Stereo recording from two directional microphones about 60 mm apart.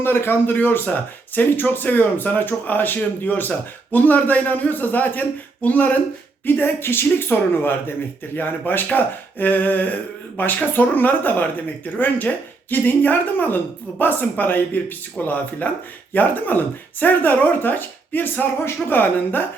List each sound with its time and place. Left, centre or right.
0.0 s a man's voice: left
6.4 s a man's voice: left